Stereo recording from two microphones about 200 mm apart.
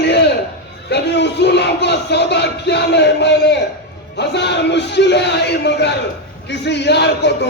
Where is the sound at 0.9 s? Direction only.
55° left (ahead or behind).